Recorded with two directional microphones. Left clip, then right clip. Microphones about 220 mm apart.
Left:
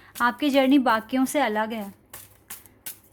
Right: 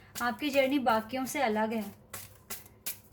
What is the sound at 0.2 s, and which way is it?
A woman's voice, 50° left (ahead or behind).